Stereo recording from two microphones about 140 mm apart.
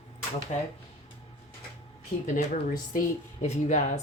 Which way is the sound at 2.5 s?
80° left.